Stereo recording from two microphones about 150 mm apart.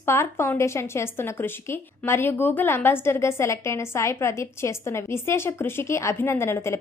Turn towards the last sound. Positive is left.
turn(degrees=15)  # may be behind; listen again after turning